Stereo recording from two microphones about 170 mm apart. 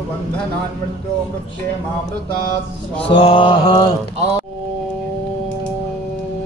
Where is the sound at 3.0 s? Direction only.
30° left (ahead or behind).